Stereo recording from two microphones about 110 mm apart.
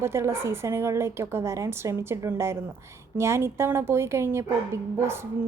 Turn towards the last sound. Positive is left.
turn(degrees=-20)  # may be behind; listen again after turning